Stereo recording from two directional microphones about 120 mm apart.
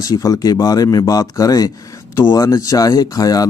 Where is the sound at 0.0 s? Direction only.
30° left (ahead or behind).